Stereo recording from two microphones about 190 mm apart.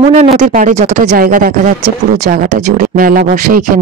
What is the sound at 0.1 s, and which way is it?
Speech, 35° right (ahead or behind).